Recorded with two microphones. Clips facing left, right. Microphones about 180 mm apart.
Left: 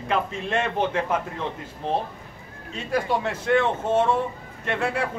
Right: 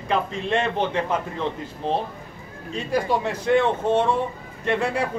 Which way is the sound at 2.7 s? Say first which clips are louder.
Right 2 dB; centre (ahead or behind).